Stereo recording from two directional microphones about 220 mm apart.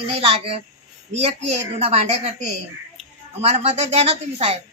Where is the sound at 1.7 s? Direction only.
30° right (ahead or behind).